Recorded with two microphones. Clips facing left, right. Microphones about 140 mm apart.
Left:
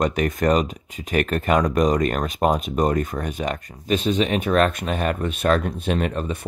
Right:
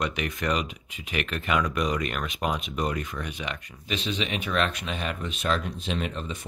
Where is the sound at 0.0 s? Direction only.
45° left (ahead or behind).